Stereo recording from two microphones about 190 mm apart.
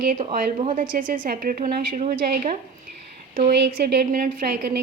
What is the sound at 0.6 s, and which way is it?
Speech, 35° right (ahead or behind).